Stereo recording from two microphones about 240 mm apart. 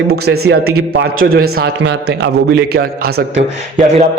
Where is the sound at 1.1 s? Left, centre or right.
Right.